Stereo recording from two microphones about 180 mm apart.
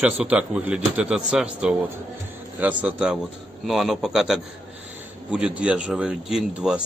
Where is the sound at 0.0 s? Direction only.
5° right (ahead or behind).